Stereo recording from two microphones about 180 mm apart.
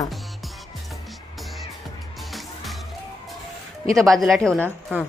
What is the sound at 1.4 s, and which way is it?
Music, centre (ahead or behind).